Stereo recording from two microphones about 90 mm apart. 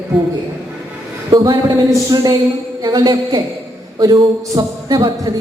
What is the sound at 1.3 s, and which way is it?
Speech, 55° right (ahead or behind).